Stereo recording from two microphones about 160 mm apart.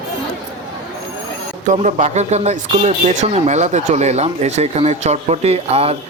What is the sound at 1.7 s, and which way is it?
Speech, 45° right (ahead or behind).